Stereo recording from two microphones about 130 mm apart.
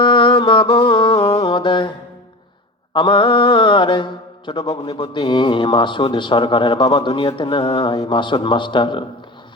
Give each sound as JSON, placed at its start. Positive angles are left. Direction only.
{"t": 0.0, "sound": "music", "side_deg": 40}
{"t": 2.9, "sound": "mantra", "side_deg": 40}